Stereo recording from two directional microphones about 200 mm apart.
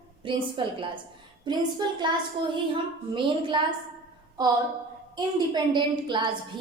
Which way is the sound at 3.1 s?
25° right (ahead or behind).